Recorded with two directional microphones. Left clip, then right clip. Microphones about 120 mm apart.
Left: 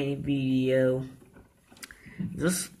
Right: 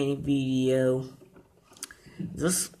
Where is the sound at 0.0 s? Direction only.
40° right (ahead or behind).